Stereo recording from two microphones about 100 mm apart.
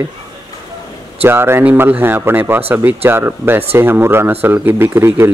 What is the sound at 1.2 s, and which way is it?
A man's voice, 25° right (ahead or behind).